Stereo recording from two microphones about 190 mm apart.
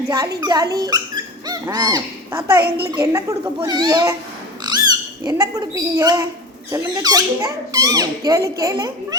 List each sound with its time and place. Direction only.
0.1 s speech: 20° right (ahead or behind)
2.6 s a child's voice: 55° right (ahead or behind)
2.9 s a child's voice: 15° right (ahead or behind)
5.2 s speech: 20° right (ahead or behind)